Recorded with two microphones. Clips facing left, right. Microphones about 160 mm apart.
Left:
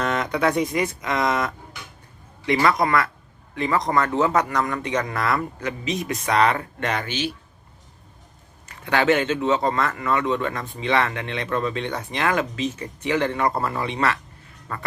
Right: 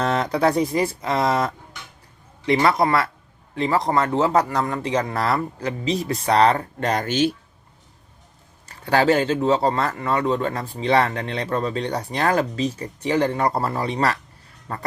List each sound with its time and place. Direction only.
0.0 s speech: 35° right (ahead or behind)
8.6 s speech: 35° right (ahead or behind)